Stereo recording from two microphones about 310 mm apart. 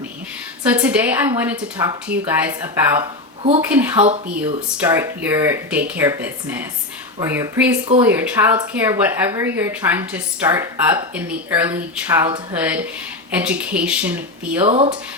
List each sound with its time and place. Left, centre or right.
0.7 s speech: centre
3.7 s speech: centre
14.7 s speech: centre